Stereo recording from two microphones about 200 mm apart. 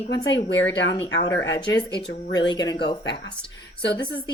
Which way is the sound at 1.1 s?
65° left (ahead or behind).